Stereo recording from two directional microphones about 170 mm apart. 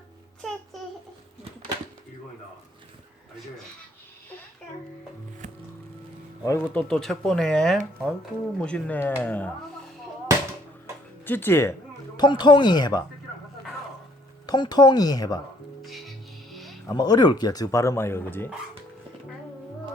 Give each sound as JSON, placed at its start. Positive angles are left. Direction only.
{"t": 6.4, "sound": "speech", "side_deg": 15}
{"t": 6.7, "sound": "speech", "side_deg": 5}
{"t": 11.3, "sound": "speech", "side_deg": 10}
{"t": 12.1, "sound": "speech", "side_deg": 25}
{"t": 14.4, "sound": "speech", "side_deg": 25}
{"t": 15.8, "sound": "music", "side_deg": 0}
{"t": 16.8, "sound": "speech", "side_deg": 25}